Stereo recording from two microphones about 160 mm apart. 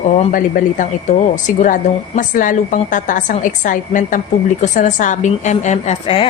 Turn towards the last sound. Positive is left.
turn(degrees=40)  # may be behind; listen again after turning